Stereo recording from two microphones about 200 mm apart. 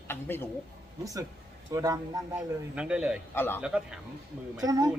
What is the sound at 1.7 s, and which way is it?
Speech, 15° right (ahead or behind).